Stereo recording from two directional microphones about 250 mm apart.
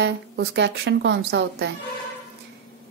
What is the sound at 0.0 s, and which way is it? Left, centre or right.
Speech, right.